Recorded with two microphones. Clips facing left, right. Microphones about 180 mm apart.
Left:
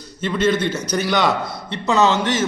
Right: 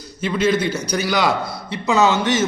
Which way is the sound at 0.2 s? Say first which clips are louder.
Even; 5° right (ahead or behind).